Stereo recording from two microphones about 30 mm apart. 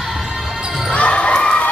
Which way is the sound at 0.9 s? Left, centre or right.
Left.